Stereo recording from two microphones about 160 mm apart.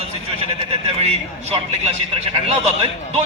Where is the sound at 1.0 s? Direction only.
40° right (ahead or behind).